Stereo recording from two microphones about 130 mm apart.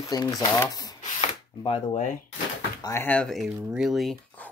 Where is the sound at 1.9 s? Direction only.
90° left.